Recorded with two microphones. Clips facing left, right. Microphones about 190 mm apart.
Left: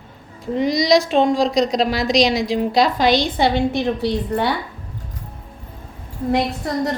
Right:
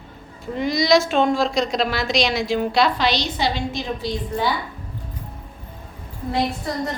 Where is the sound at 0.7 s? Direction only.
40° left (ahead or behind); by 4.5 s 65° left (ahead or behind).